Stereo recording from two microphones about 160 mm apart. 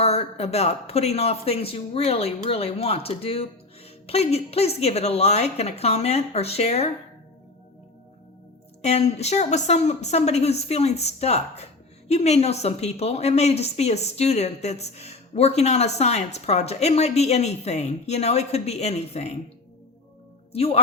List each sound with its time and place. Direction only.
0.0 s a man's voice: 40° left (ahead or behind)
8.8 s speech: 40° left (ahead or behind)
20.5 s a man's voice: 40° left (ahead or behind)